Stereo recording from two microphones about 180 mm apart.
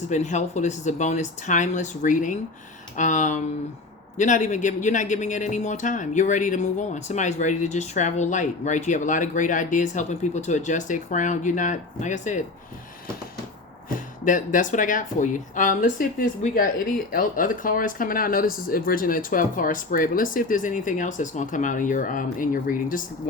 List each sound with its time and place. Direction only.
0.1 s speech: 40° left (ahead or behind)
13.9 s speech: 45° left (ahead or behind)